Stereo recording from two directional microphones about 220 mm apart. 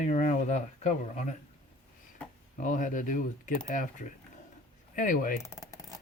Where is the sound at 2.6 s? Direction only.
35° left (ahead or behind).